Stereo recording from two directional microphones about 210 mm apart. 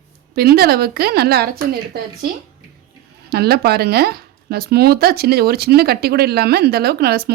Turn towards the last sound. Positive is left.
turn(degrees=-50)  # may be behind; listen again after turning